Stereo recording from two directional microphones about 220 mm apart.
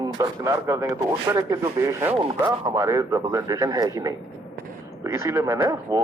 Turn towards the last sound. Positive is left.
turn(degrees=-15)  # may be behind; listen again after turning